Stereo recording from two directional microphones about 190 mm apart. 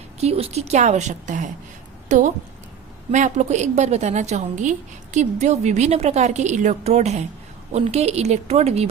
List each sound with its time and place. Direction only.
0.2 s a woman's voice: 30° right (ahead or behind)